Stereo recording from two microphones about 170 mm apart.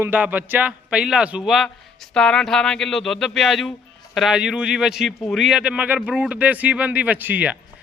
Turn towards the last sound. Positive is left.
turn(degrees=-10)  # may be behind; listen again after turning